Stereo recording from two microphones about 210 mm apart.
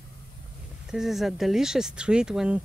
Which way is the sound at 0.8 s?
Centre (ahead or behind).